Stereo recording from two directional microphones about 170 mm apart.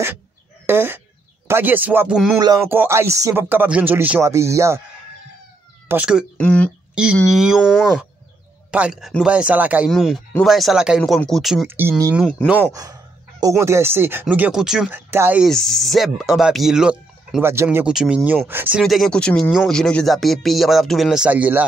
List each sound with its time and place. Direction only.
0.7 s fowl: 10° right (ahead or behind)
1.5 s speech: 10° right (ahead or behind)
2.3 s speech: 20° right (ahead or behind)
5.9 s speech: 5° right (ahead or behind)
6.4 s speech: 5° left (ahead or behind)
11.6 s speech: 15° right (ahead or behind)
12.2 s speech: 5° left (ahead or behind)
12.7 s speech: 20° right (ahead or behind)
15.4 s speech: centre (ahead or behind)
18.8 s speech: centre (ahead or behind)